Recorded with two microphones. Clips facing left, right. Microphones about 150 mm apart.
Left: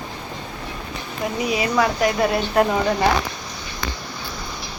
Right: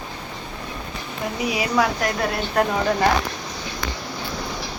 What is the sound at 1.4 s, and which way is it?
A woman's voice, 5° right (ahead or behind).